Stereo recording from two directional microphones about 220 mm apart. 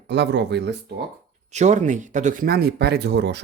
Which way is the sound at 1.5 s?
30° right (ahead or behind).